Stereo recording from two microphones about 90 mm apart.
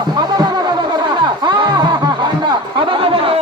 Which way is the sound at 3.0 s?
80° right.